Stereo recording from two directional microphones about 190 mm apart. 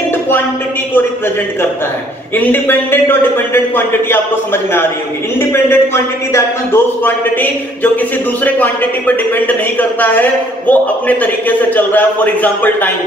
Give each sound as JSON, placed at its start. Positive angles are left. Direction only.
{"t": 2.3, "sound": "a man's voice", "side_deg": 10}
{"t": 5.4, "sound": "a man's voice", "side_deg": 10}
{"t": 8.5, "sound": "a man's voice", "side_deg": 10}